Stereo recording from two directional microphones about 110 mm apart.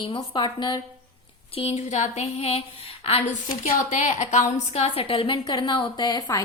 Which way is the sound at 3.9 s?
90° left.